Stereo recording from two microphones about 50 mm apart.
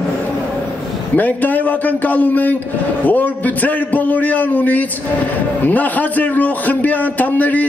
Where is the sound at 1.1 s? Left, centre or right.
Left.